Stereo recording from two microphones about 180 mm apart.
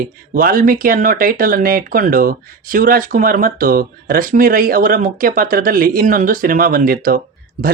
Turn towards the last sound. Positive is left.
turn(degrees=-45)  # may be behind; listen again after turning